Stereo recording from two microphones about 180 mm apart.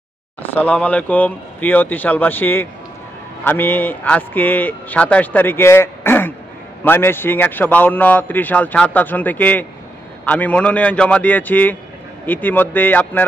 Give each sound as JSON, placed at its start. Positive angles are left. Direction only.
{"t": 0.6, "sound": "a man's voice", "side_deg": 5}